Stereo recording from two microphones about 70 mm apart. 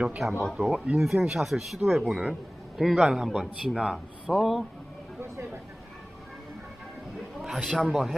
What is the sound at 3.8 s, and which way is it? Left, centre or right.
Speech, centre.